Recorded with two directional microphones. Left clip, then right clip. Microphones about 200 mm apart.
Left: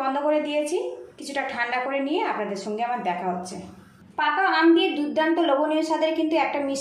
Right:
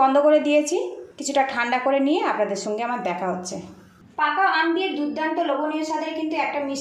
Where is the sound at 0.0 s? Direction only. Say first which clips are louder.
Right 7 dB; 30° right (ahead or behind).